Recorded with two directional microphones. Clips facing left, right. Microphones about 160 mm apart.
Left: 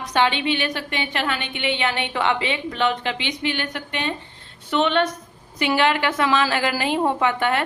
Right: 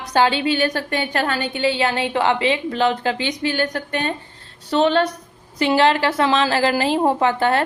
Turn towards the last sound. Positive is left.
turn(degrees=-35)  # may be behind; listen again after turning